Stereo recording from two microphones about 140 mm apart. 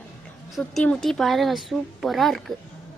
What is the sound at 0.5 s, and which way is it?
A woman's voice, 5° left (ahead or behind).